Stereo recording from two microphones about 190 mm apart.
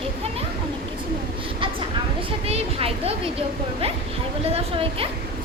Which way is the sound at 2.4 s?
30° right (ahead or behind).